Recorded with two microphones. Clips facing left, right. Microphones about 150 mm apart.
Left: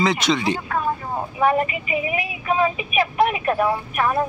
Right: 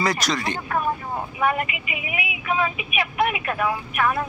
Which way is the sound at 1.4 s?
35° left (ahead or behind).